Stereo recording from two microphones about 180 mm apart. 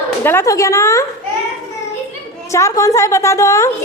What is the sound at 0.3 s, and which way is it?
Speech, 15° left (ahead or behind).